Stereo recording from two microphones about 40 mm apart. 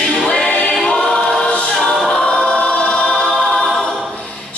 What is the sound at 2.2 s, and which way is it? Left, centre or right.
Choir, left.